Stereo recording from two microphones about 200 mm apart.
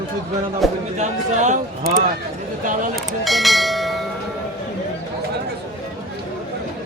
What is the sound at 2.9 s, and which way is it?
Speech, centre (ahead or behind).